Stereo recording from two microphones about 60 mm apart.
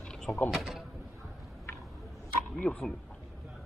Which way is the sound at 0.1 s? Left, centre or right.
Centre.